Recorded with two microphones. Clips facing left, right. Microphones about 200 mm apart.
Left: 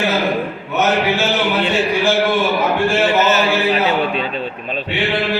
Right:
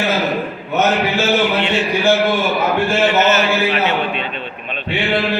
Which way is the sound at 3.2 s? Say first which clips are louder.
Even; 35° left (ahead or behind).